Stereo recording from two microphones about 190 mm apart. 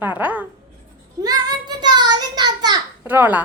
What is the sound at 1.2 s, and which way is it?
Child singing, 20° right (ahead or behind).